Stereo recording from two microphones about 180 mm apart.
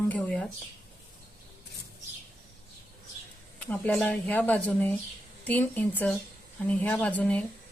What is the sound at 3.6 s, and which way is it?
A woman's voice, 10° left (ahead or behind).